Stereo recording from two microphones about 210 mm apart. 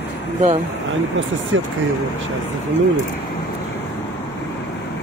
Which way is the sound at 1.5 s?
70° right (ahead or behind).